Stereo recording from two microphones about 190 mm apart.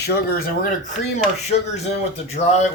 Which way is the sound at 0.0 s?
50° left (ahead or behind).